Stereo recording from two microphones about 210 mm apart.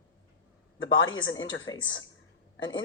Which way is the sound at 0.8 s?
70° left (ahead or behind).